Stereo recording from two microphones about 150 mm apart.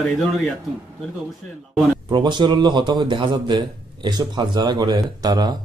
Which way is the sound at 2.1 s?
30° right (ahead or behind).